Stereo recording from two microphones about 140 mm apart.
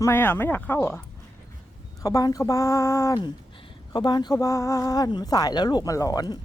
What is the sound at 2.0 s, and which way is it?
Speech, 25° left (ahead or behind).